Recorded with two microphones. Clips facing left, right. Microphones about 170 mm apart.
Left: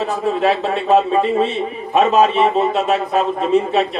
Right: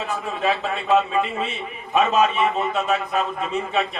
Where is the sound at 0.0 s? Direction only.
35° left (ahead or behind).